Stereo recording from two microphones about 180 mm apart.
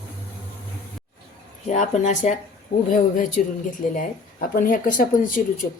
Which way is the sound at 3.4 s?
45° left (ahead or behind).